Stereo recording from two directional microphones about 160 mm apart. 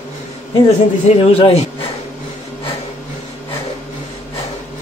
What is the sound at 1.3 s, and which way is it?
Speech, 35° left (ahead or behind).